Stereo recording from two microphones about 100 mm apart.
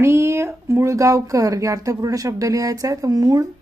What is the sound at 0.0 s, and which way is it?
Speech, 25° right (ahead or behind).